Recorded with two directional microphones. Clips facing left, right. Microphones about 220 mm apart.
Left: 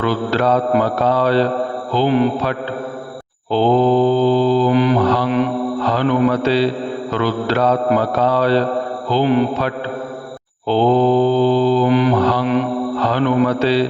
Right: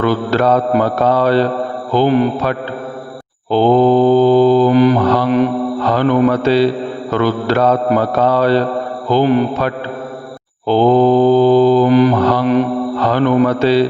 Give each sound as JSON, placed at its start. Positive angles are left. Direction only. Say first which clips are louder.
{"t": 0.0, "sound": "mantra", "louder": "right 3 dB", "side_deg": -50}
{"t": 5.8, "sound": "a man's voice", "louder": "right 3 dB", "side_deg": -50}
{"t": 7.1, "sound": "mantra", "louder": "right 4 dB", "side_deg": -50}
{"t": 13.0, "sound": "a man's voice", "louder": "right 3 dB", "side_deg": -50}